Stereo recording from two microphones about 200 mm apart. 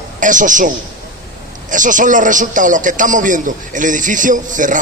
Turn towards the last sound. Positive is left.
turn(degrees=-40)  # may be behind; listen again after turning